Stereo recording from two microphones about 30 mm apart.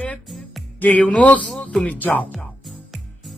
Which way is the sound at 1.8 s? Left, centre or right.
Left.